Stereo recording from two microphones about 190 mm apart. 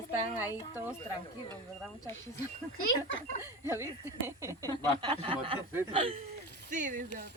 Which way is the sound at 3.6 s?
15° right (ahead or behind).